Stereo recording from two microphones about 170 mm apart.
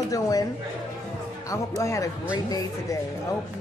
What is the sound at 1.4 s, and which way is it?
Speech, 15° left (ahead or behind).